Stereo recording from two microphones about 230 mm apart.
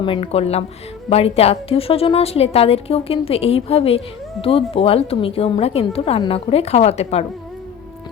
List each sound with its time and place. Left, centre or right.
0.0 s a woman's voice: left